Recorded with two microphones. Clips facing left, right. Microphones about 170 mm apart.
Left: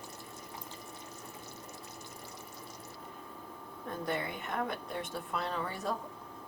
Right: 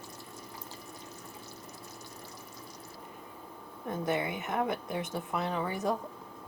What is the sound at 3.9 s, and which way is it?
A woman's voice, 20° right (ahead or behind).